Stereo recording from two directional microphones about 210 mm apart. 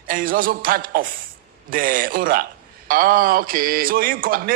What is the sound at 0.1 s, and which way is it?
A man's voice, 40° right (ahead or behind).